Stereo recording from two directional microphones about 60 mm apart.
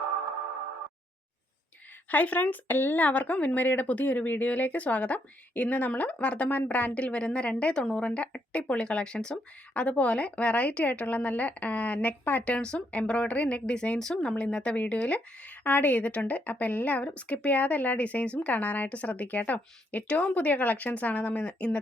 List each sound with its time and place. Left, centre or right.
2.0 s speech: left
12.5 s speech: centre